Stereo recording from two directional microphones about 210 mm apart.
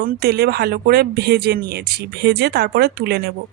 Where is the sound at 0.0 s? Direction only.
45° right (ahead or behind).